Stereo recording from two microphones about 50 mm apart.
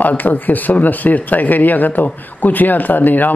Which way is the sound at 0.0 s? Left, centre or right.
Left.